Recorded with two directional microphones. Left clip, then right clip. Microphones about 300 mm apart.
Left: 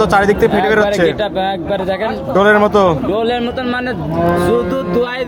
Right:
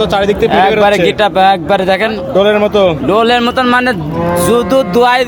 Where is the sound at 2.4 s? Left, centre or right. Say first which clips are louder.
Right 1 dB; centre.